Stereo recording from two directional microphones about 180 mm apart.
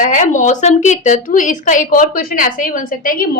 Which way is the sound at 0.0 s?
45° left (ahead or behind).